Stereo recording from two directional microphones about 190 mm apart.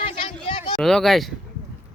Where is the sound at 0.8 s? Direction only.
Centre (ahead or behind).